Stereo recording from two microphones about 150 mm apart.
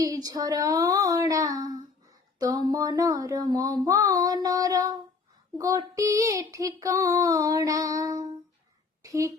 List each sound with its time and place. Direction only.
0.0 s child singing: 25° right (ahead or behind)
9.0 s speech: 20° right (ahead or behind)